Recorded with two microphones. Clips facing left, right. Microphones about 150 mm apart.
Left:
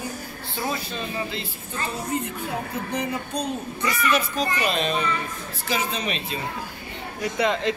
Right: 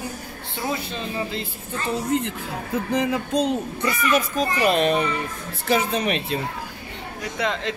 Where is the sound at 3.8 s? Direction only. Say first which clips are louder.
Even; 50° right (ahead or behind).